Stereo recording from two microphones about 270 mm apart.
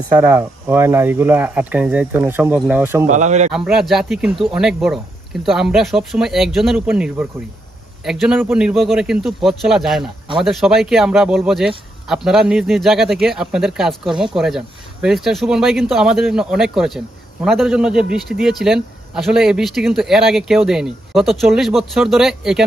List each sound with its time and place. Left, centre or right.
0.1 s speech: centre
3.1 s speech: right
3.5 s speech: centre